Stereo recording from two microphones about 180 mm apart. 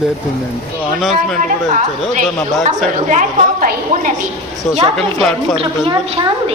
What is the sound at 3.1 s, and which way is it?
A woman's voice, 45° right (ahead or behind).